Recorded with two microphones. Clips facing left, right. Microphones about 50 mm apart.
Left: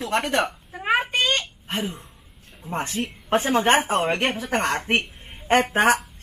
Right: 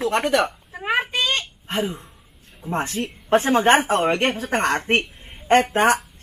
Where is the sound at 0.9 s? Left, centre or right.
Left.